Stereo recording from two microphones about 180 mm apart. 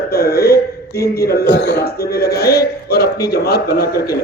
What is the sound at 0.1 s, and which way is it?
A man's voice, 60° left (ahead or behind).